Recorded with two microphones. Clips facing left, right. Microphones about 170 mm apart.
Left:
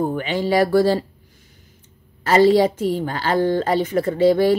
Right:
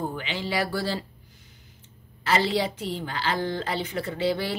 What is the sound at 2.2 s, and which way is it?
A woman's voice, 45° left (ahead or behind).